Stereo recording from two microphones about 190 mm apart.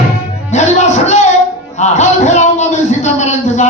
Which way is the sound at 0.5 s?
40° left (ahead or behind).